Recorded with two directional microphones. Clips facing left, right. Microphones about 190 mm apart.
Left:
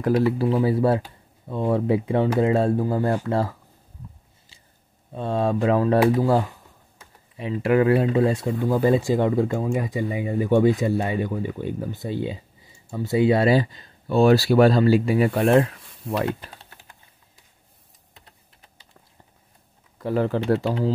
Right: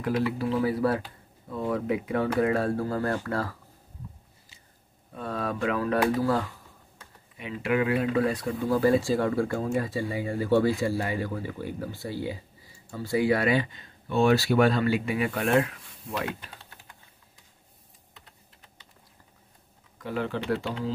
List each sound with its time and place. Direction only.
0.0 s speech: 35° left (ahead or behind)
4.5 s a sound: 30° left (ahead or behind)
5.1 s speech: 25° left (ahead or behind)
7.3 s speech: 35° left (ahead or behind)
8.1 s speech: 25° left (ahead or behind)
20.0 s speech: 40° left (ahead or behind)